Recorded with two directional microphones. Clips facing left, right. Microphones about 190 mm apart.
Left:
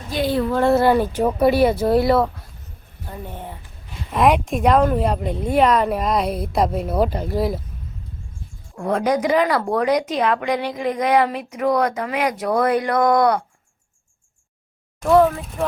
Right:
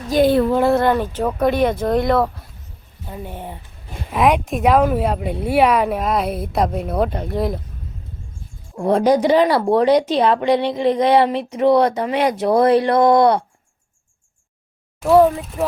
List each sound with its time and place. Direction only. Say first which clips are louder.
0.1 s speech: right 6 dB; 55° right (ahead or behind)
0.7 s speech: left 1 dB; 5° left (ahead or behind)
3.1 s speech: right 2 dB; 10° right (ahead or behind)
4.1 s speech: even; centre (ahead or behind)
8.7 s speech: right 5 dB; 30° right (ahead or behind)
15.0 s speech: right 2 dB; 5° right (ahead or behind)